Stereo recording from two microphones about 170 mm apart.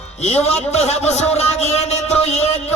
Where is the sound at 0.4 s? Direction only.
40° left (ahead or behind).